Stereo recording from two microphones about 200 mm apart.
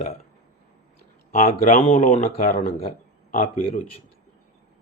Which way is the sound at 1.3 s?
40° left (ahead or behind).